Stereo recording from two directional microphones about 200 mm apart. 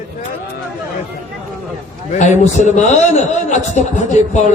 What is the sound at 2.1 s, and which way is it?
A man's voice, 35° left (ahead or behind).